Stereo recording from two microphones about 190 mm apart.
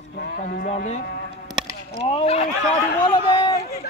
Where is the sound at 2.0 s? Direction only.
30° left (ahead or behind).